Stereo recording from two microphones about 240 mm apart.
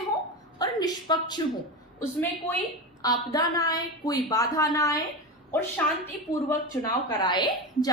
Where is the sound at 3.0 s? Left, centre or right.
Centre.